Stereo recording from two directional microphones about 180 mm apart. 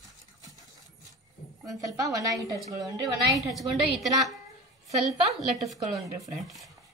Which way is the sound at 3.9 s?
Centre (ahead or behind).